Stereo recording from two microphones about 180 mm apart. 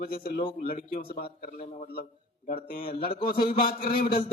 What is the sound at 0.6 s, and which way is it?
Speech, 55° left (ahead or behind).